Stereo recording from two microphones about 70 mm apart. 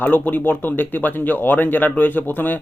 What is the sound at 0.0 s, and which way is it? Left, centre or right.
Speech, left.